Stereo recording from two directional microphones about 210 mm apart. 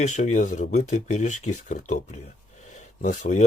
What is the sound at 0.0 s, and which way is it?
Speech, 35° left (ahead or behind).